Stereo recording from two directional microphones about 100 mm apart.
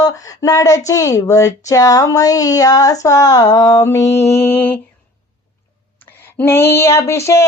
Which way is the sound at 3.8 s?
30° left (ahead or behind).